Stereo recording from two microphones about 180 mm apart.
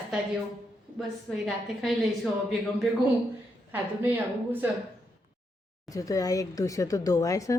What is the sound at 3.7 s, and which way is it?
Speech, 10° right (ahead or behind).